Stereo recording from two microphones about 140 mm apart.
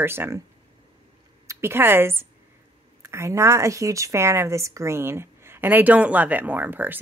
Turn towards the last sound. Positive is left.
turn(degrees=-15)  # may be behind; listen again after turning